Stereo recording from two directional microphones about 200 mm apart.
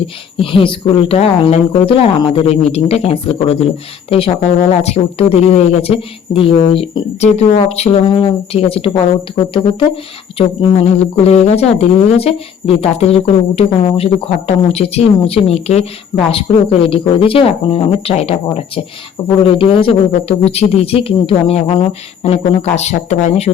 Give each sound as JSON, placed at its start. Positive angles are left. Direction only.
{"t": 0.3, "sound": "speech", "side_deg": 25}
{"t": 4.7, "sound": "speech", "side_deg": 30}
{"t": 19.4, "sound": "speech", "side_deg": 25}